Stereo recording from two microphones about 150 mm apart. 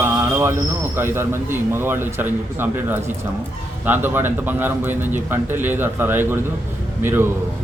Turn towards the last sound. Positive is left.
turn(degrees=-15)  # may be behind; listen again after turning